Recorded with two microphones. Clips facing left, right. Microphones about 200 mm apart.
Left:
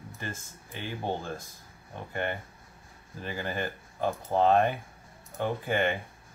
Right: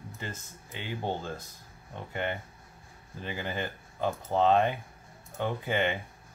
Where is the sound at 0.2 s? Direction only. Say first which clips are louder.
Left 2 dB; 20° right (ahead or behind).